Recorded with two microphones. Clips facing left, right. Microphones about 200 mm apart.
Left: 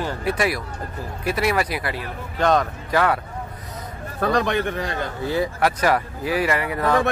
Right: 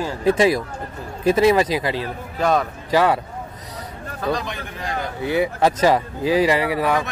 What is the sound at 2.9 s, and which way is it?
Speech, 15° right (ahead or behind).